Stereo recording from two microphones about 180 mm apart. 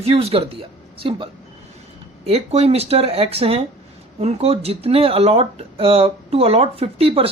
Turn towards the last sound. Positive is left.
turn(degrees=-30)  # may be behind; listen again after turning